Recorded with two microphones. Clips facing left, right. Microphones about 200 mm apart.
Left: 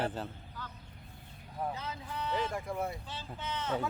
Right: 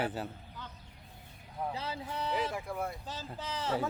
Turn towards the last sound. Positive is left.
turn(degrees=-35)  # may be behind; listen again after turning